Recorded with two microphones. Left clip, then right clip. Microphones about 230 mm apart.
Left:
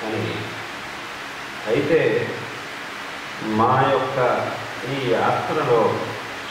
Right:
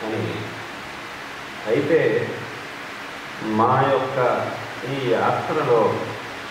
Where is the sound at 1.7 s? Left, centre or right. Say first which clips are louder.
Even; centre.